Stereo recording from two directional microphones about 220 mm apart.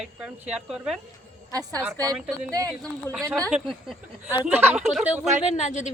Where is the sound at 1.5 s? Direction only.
15° right (ahead or behind).